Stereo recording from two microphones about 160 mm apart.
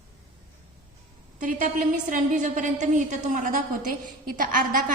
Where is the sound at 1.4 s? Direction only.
60° right (ahead or behind).